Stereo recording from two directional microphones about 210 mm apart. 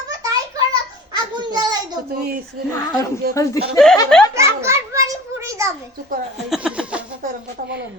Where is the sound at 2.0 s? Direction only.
45° right (ahead or behind).